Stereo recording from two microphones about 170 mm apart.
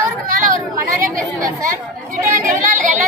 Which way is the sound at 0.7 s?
20° right (ahead or behind).